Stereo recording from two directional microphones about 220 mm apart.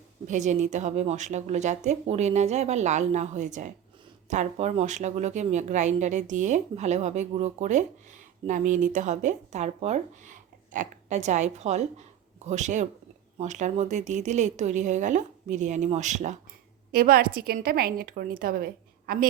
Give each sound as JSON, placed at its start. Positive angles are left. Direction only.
{"t": 0.3, "sound": "speech", "side_deg": -35}